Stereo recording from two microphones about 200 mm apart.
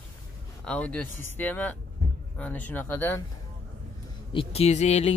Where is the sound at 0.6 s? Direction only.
5° left (ahead or behind).